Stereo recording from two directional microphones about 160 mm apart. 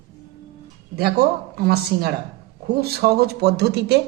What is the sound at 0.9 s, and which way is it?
Speech, 80° right.